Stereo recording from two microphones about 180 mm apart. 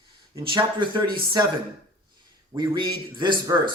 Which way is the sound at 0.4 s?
25° right (ahead or behind).